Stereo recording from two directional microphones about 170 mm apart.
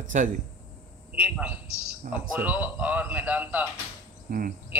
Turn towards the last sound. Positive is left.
turn(degrees=-55)  # may be behind; listen again after turning